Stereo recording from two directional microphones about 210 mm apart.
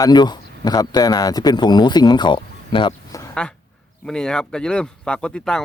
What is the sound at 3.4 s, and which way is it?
Speech, 5° left (ahead or behind).